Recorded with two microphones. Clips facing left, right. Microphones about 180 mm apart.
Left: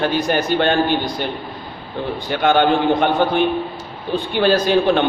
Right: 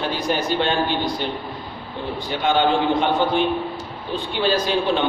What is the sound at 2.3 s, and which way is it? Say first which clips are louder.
A man's voice: left 4 dB; 60° left (ahead or behind).